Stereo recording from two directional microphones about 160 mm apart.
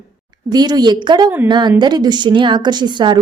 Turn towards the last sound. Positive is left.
turn(degrees=-30)  # may be behind; listen again after turning